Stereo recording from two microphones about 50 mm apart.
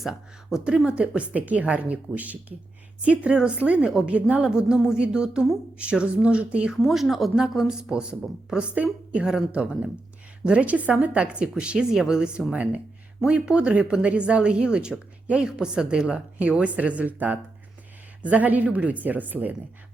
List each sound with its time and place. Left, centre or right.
0.0 s a woman's voice: centre
0.9 s a woman's voice: right
3.6 s speech: right
3.8 s a woman's voice: centre
4.1 s speech: right
4.4 s a woman's voice: centre
6.8 s a woman's voice: centre
8.7 s a woman's voice: right